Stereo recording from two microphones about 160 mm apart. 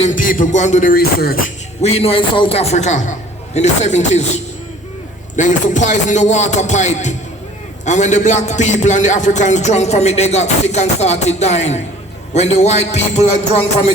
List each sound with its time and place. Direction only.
0.0 s music: 55° left (ahead or behind)
1.8 s a man's voice: 40° left (ahead or behind)
5.4 s a man's voice: 50° left (ahead or behind)